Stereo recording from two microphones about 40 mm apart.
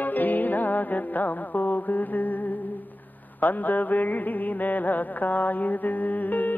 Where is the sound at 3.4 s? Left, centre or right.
Left.